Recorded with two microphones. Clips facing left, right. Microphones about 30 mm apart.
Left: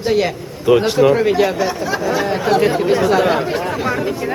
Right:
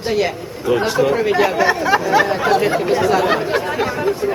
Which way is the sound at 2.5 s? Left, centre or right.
Centre.